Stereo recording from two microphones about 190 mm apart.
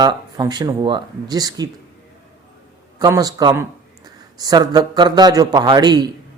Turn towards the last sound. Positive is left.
turn(degrees=-20)  # may be behind; listen again after turning